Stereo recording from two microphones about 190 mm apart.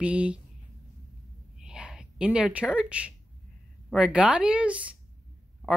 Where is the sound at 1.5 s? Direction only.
5° right (ahead or behind).